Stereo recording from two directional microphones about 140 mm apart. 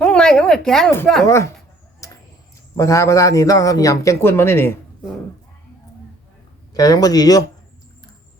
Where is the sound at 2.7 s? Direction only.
20° left (ahead or behind).